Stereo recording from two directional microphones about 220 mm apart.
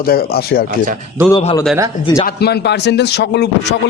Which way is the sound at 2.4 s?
50° left (ahead or behind).